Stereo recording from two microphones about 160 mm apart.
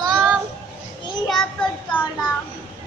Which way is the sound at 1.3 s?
5° left (ahead or behind).